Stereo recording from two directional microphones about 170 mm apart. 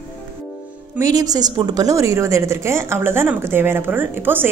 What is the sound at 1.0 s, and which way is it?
A woman's voice, 20° right (ahead or behind).